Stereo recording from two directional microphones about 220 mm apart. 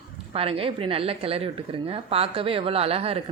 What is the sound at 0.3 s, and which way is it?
A woman's voice, 25° right (ahead or behind).